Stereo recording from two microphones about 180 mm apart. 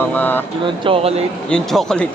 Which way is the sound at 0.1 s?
10° left (ahead or behind).